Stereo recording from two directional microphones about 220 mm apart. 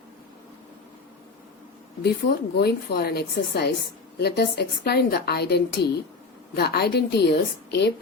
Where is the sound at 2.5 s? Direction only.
50° left (ahead or behind).